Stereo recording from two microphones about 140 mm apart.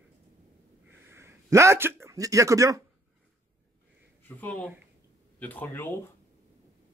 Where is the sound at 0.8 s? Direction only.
15° right (ahead or behind).